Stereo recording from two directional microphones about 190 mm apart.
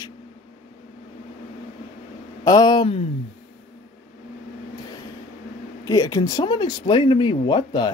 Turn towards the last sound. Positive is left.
turn(degrees=25)  # may be behind; listen again after turning